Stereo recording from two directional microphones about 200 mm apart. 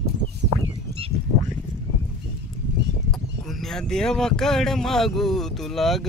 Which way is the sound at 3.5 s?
Centre (ahead or behind).